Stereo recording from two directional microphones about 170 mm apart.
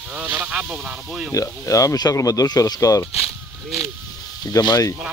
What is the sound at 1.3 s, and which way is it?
Speech, 20° left (ahead or behind).